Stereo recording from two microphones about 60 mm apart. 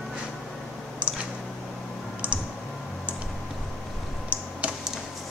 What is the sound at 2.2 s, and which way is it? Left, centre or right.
Computer keyboard, right.